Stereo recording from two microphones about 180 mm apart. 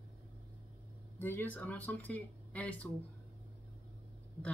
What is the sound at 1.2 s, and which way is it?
Speech, 10° left (ahead or behind).